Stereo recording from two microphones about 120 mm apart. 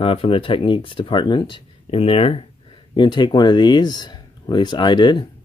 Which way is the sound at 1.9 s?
55° left (ahead or behind).